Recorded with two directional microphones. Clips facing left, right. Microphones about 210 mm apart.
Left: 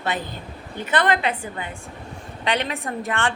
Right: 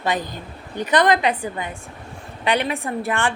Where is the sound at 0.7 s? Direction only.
15° right (ahead or behind).